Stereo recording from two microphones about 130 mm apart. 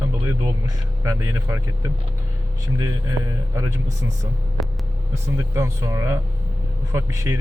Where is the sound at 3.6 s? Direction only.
25° right (ahead or behind).